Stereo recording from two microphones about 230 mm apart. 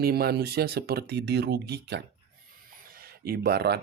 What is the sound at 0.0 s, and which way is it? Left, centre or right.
Speech, right.